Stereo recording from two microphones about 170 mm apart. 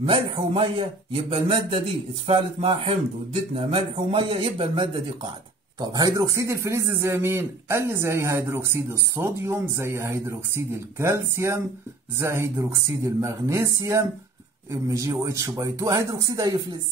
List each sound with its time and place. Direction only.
0.0 s a man's voice: 35° right (ahead or behind)